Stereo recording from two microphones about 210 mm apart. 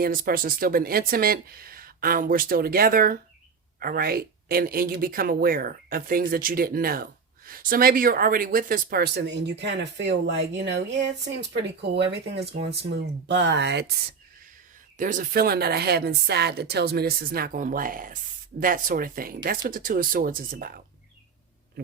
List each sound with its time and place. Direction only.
0.0 s speech: 45° right (ahead or behind)
14.9 s speech: 40° right (ahead or behind)